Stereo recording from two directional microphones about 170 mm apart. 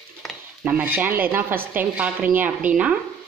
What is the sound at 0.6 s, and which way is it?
Speech, 10° right (ahead or behind).